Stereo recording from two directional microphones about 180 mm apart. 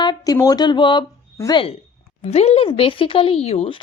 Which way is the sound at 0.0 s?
20° left (ahead or behind).